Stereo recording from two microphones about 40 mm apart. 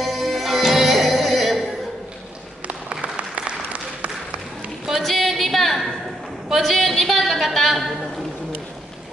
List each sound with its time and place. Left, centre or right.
0.0 s music: centre
2.9 s applause: right
5.0 s a sound: centre